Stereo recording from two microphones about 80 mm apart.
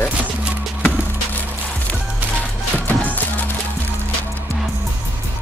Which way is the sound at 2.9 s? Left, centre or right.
Left.